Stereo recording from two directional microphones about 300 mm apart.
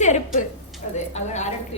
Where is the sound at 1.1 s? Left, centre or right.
Left.